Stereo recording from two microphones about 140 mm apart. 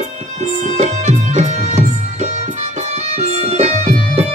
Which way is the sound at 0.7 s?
60° right (ahead or behind).